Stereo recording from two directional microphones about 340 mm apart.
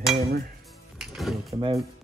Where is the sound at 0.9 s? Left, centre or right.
Centre.